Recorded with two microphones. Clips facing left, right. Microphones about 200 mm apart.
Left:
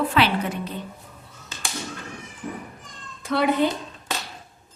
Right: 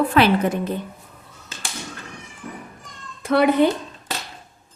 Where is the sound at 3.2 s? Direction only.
60° right (ahead or behind).